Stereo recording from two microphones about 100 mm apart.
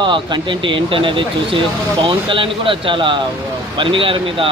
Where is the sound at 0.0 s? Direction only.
55° right (ahead or behind).